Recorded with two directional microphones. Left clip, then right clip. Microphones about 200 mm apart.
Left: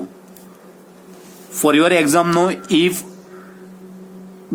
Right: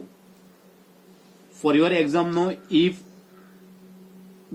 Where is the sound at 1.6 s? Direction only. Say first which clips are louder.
Left 6 dB; 55° left (ahead or behind).